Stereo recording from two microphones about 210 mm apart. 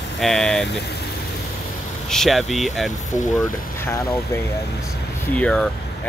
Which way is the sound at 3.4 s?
15° left (ahead or behind).